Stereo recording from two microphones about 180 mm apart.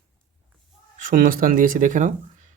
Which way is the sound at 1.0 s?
50° right (ahead or behind).